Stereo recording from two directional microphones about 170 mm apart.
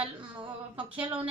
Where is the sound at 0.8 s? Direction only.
5° right (ahead or behind).